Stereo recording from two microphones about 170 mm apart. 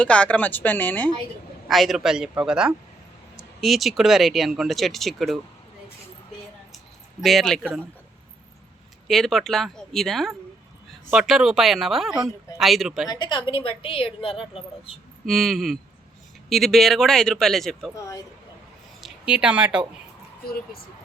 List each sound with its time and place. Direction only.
0.0 s speech: 5° left (ahead or behind)
7.2 s speech: centre (ahead or behind)
9.0 s speech: centre (ahead or behind)
13.1 s a woman's voice: 25° left (ahead or behind)
15.3 s speech: centre (ahead or behind)
19.0 s speech: 5° right (ahead or behind)